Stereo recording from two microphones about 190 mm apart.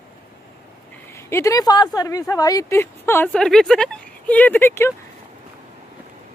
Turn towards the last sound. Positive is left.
turn(degrees=15)  # may be behind; listen again after turning